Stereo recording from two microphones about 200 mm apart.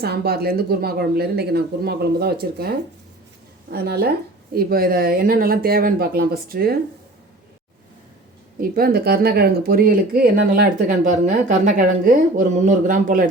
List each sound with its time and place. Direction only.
0.0 s speech: 50° right (ahead or behind)
8.7 s speech: 50° right (ahead or behind)